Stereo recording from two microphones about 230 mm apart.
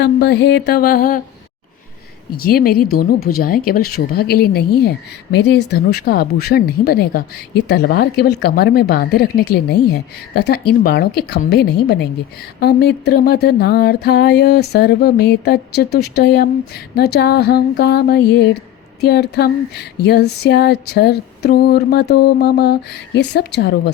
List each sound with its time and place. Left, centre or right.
0.0 s music: left
2.3 s speech: left
4.8 s music: left